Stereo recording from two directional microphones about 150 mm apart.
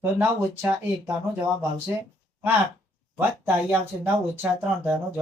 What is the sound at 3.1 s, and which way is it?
Speech, 15° right (ahead or behind).